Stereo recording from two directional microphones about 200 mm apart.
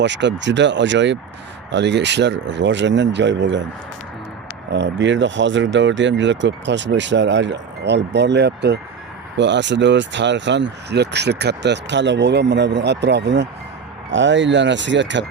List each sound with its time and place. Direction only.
0.0 s speech: 60° right (ahead or behind)
4.7 s speech: 60° right (ahead or behind)